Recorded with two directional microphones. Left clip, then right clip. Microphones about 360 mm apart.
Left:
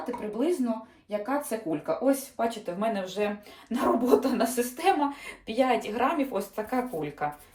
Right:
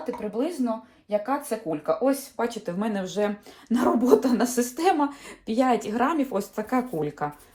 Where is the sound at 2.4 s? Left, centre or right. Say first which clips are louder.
Right 1 dB; centre.